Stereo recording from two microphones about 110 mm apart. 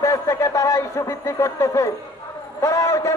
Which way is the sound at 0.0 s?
25° left (ahead or behind).